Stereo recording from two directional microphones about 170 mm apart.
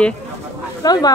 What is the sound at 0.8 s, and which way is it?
Speech, 25° left (ahead or behind).